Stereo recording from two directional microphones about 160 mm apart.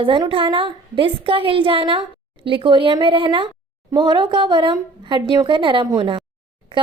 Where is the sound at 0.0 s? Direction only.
30° right (ahead or behind).